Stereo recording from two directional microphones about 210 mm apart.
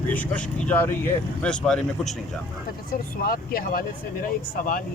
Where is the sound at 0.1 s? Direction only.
5° left (ahead or behind).